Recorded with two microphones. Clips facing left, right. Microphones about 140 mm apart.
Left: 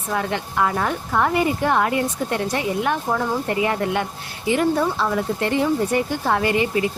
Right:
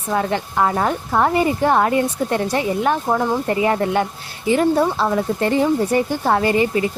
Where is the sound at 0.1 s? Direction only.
35° right (ahead or behind).